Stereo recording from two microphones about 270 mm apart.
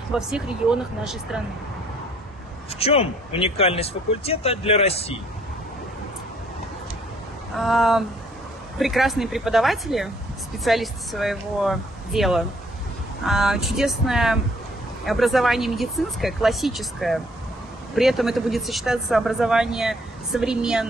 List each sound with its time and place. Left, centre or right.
0.1 s speech: centre
2.8 s speech: left
7.5 s speech: centre